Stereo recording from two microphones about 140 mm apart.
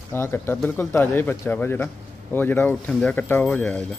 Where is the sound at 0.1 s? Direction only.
15° left (ahead or behind).